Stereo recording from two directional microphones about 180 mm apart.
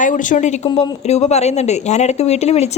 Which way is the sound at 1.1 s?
40° left (ahead or behind).